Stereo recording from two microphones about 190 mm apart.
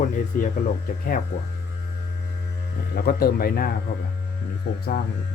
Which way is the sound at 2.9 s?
50° left (ahead or behind).